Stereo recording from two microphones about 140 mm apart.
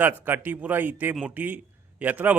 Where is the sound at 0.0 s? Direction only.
15° right (ahead or behind).